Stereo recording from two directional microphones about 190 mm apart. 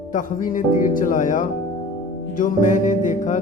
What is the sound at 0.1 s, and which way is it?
Speech, 45° left (ahead or behind).